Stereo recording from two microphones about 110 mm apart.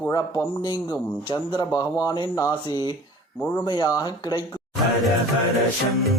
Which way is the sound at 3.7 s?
35° left (ahead or behind).